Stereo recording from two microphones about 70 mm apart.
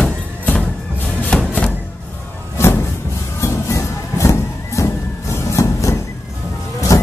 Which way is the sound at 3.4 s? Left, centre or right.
Left.